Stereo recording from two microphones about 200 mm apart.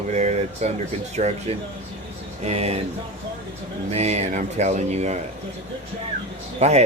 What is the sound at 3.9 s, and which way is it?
Speech, 35° right (ahead or behind).